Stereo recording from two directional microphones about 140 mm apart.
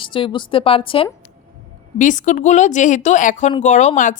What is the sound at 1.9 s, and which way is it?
A woman's voice, 65° left (ahead or behind).